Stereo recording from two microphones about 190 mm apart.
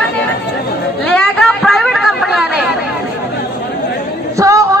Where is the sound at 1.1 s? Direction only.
5° left (ahead or behind).